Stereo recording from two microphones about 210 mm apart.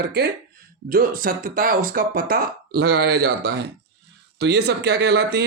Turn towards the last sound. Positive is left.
turn(degrees=-50)  # may be behind; listen again after turning